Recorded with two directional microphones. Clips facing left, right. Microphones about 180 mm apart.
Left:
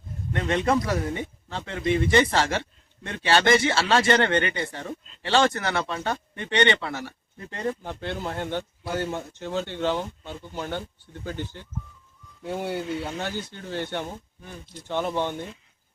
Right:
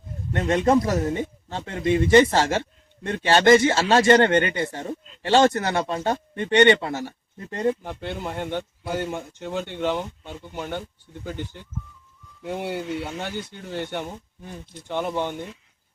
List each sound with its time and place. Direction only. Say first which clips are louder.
0.4 s speech: right 4 dB; 45° right (ahead or behind)
7.9 s speech: even; 10° right (ahead or behind)
12.6 s speech: even; 10° right (ahead or behind)